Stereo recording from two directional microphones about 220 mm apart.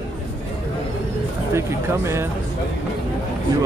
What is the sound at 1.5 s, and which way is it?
Speech, 10° right (ahead or behind).